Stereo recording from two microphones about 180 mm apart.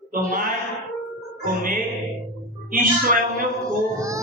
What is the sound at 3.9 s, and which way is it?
Baby cry, 15° right (ahead or behind).